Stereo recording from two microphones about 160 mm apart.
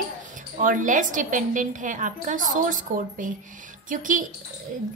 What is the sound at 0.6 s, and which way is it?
Speech, 55° right (ahead or behind).